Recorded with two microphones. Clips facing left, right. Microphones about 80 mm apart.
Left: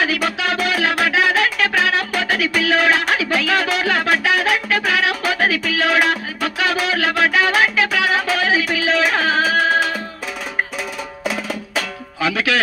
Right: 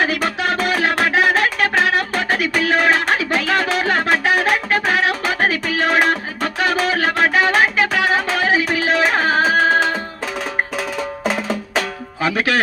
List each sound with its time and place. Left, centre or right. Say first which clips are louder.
0.0 s music: right 1 dB; right
11.2 s music: right 1 dB; right